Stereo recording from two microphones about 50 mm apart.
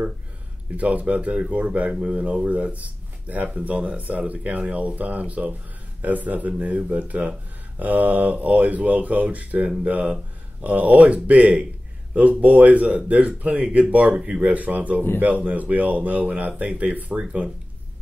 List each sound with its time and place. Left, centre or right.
0.7 s speech: right